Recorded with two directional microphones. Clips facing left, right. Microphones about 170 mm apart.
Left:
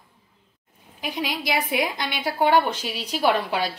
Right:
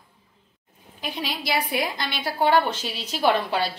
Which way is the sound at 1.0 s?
15° left (ahead or behind).